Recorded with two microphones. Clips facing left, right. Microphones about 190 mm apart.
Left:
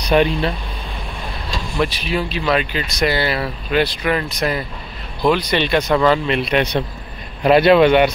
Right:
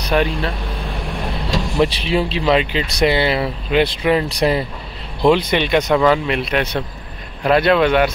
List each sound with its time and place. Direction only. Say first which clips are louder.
0.1 s speech: left 3 dB; 5° left (ahead or behind)
1.8 s speech: right 3 dB; 25° right (ahead or behind)
5.5 s speech: right 1 dB; 15° right (ahead or behind)
7.4 s speech: left 3 dB; 5° left (ahead or behind)